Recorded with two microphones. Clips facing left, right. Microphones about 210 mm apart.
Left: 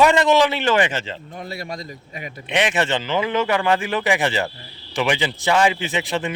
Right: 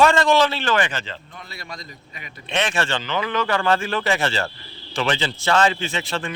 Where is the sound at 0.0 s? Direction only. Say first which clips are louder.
Left 1 dB; 20° left (ahead or behind).